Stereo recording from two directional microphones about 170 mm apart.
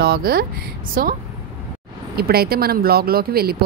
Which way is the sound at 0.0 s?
65° right (ahead or behind).